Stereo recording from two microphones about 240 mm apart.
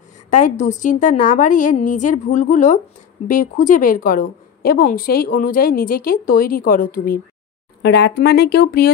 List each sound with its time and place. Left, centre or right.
0.3 s a woman's voice: left